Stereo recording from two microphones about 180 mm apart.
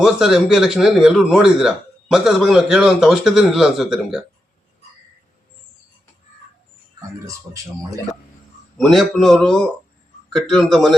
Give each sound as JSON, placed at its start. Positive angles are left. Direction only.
{"t": 0.0, "sound": "a man's voice", "side_deg": -5}
{"t": 7.3, "sound": "a man's voice", "side_deg": -20}
{"t": 8.8, "sound": "a man's voice", "side_deg": 0}